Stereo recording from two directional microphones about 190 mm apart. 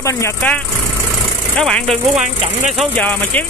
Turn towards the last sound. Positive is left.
turn(degrees=10)  # may be behind; listen again after turning